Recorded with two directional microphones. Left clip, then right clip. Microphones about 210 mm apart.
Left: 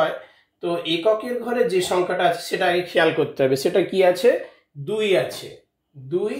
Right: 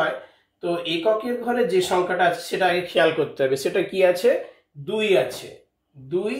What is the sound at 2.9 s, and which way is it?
A man's voice, 30° left (ahead or behind).